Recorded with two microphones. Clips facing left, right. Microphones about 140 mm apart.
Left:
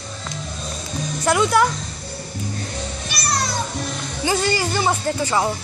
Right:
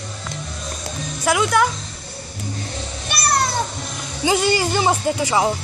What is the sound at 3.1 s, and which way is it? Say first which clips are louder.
Music: right 5 dB; 55° right (ahead or behind).